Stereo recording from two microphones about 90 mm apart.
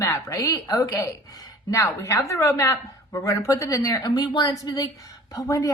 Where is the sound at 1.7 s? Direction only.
35° left (ahead or behind).